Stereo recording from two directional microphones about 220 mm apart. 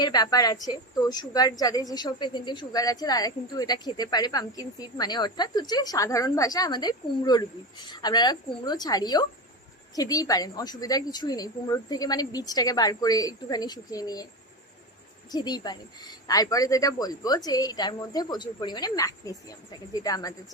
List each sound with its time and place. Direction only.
0.0 s a woman's voice: 20° left (ahead or behind)
15.3 s a woman's voice: 20° left (ahead or behind)